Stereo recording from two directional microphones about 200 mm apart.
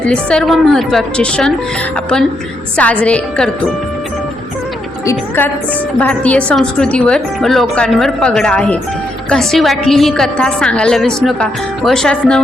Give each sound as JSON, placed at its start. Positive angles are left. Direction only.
{"t": 0.0, "sound": "a woman's voice", "side_deg": 5}
{"t": 2.7, "sound": "a woman's voice", "side_deg": 5}
{"t": 5.0, "sound": "a woman's voice", "side_deg": 10}